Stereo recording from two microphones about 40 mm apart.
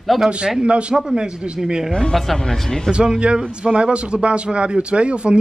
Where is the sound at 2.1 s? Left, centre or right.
Centre.